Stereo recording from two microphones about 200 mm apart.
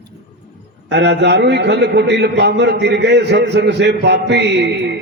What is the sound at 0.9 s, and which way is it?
A man's voice, 60° right (ahead or behind).